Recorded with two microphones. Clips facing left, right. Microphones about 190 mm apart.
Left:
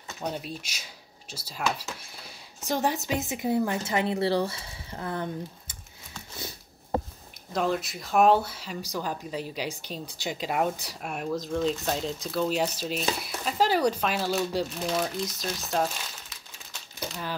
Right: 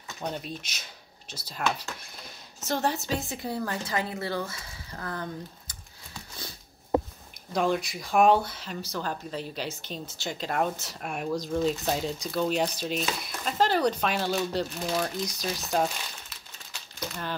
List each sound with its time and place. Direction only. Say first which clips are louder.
0.2 s speech: left 1 dB; 5° left (ahead or behind)
2.6 s a woman's voice: left 1 dB; 15° left (ahead or behind)
7.5 s speech: right 1 dB; centre (ahead or behind)